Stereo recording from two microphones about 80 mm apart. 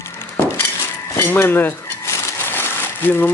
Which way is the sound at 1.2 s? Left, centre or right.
Left.